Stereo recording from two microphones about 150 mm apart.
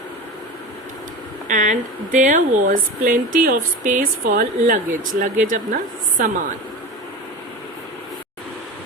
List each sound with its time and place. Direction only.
1.5 s speech: 55° right (ahead or behind)